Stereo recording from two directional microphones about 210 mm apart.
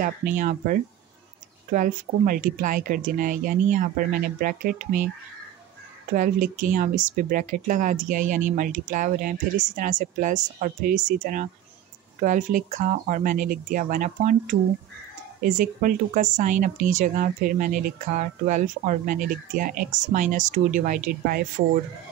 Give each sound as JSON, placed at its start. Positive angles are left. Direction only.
{"t": 0.4, "sound": "speech", "side_deg": -40}
{"t": 6.1, "sound": "speech", "side_deg": -40}